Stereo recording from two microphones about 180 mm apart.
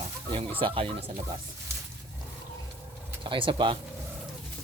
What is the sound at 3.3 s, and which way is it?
Speech, 30° right (ahead or behind).